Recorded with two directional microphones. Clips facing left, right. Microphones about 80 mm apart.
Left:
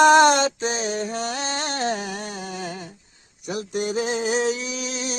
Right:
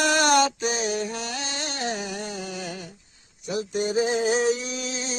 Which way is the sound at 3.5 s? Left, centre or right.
Left.